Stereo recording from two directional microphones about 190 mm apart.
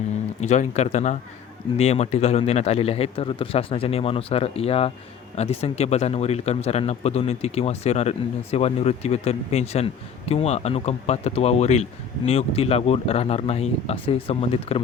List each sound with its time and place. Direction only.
0.4 s speech: 35° left (ahead or behind)